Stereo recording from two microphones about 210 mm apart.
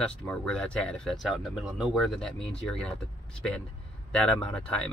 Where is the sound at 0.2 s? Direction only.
5° left (ahead or behind).